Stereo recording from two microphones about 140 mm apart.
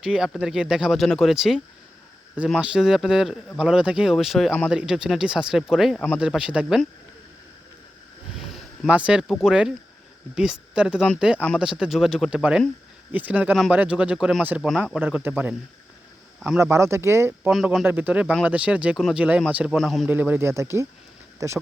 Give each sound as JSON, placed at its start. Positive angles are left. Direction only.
{"t": 0.0, "sound": "speech", "side_deg": -5}
{"t": 8.4, "sound": "a sound", "side_deg": 0}
{"t": 9.3, "sound": "speech", "side_deg": -5}
{"t": 16.6, "sound": "speech", "side_deg": -20}
{"t": 20.1, "sound": "speech", "side_deg": -15}